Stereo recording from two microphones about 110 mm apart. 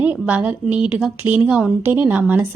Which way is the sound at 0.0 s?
15° right (ahead or behind).